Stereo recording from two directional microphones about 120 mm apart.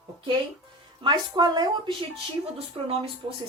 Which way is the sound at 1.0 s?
35° right (ahead or behind).